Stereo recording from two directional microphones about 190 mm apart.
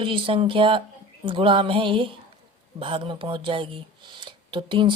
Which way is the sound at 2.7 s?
30° right (ahead or behind).